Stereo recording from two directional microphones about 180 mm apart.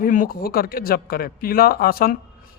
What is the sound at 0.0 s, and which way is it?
Speech, 50° left (ahead or behind).